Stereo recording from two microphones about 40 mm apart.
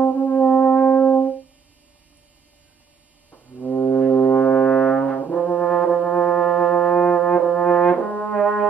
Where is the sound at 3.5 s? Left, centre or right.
Left.